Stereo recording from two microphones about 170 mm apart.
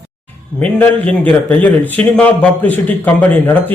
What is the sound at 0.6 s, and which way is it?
A man's voice, 10° left (ahead or behind).